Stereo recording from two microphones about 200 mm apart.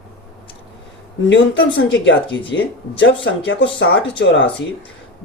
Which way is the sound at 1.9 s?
65° left (ahead or behind).